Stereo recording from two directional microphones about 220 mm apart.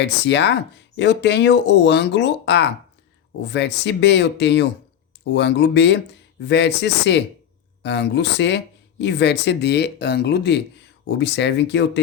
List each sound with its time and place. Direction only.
0.0 s speech: 50° left (ahead or behind)